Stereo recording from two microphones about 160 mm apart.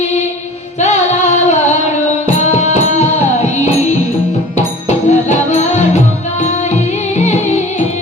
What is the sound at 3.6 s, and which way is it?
Music, 45° left (ahead or behind).